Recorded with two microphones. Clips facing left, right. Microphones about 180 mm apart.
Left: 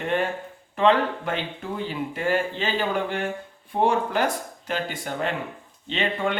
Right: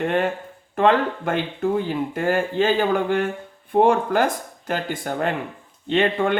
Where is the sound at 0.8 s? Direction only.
50° right (ahead or behind).